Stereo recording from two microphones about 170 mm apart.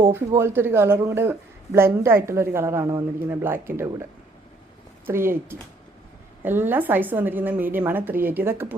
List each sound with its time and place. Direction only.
0.0 s speech: 20° right (ahead or behind)
5.0 s speech: 15° right (ahead or behind)